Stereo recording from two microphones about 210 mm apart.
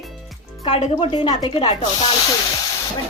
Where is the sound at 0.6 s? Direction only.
30° left (ahead or behind).